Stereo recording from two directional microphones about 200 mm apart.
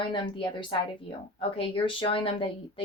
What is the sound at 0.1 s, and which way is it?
Speech, 25° left (ahead or behind).